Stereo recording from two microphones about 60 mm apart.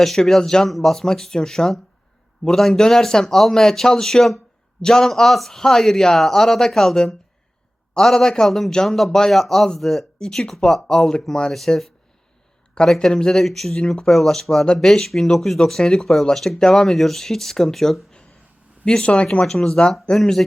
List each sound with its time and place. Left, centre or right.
0.0 s speech: centre
19.5 s speech: centre